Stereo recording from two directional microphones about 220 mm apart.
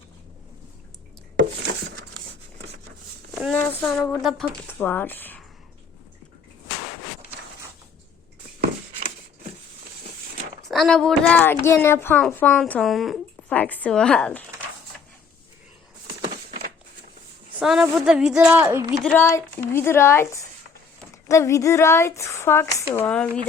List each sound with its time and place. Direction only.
3.3 s speech: 5° left (ahead or behind)
9.0 s a sound: 25° right (ahead or behind)
10.7 s speech: centre (ahead or behind)
17.6 s speech: centre (ahead or behind)
19.1 s speech: 10° left (ahead or behind)